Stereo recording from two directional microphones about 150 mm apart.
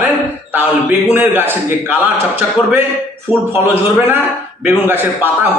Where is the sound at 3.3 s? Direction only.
35° left (ahead or behind).